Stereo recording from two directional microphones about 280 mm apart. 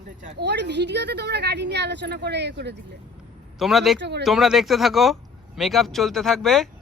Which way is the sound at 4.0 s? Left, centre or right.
Right.